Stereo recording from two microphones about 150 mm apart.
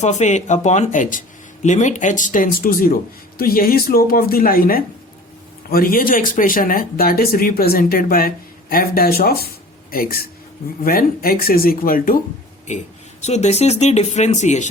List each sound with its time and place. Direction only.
0.0 s speech: 50° left (ahead or behind); by 9.5 s 90° left
9.9 s speech: 80° left
12.7 s speech: 55° left (ahead or behind)